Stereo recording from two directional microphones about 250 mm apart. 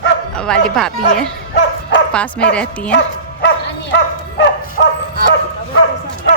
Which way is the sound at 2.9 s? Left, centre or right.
Left.